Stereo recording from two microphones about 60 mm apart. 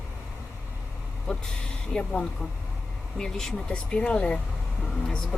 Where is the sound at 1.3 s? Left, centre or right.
Centre.